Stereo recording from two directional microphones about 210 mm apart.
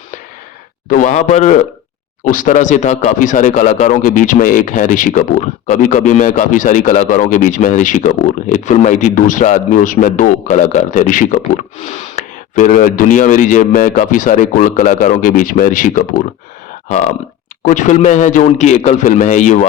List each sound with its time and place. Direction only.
0.9 s speech: 35° left (ahead or behind)
17.6 s speech: 35° left (ahead or behind)